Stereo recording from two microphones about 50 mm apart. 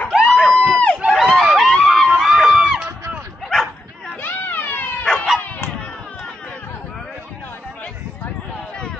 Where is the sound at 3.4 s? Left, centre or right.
Centre.